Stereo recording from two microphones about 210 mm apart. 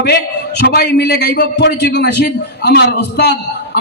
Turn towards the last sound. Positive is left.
turn(degrees=50)  # may be behind; listen again after turning